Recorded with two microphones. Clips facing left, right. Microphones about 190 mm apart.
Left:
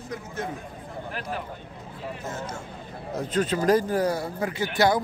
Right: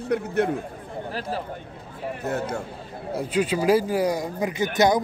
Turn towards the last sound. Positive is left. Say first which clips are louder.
# right 2 dB
turn(degrees=-20)  # may be behind; listen again after turning